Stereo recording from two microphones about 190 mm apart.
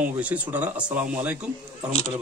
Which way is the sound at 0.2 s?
10° right (ahead or behind).